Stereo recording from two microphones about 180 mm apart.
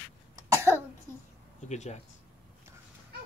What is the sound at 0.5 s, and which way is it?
Cough, 15° right (ahead or behind).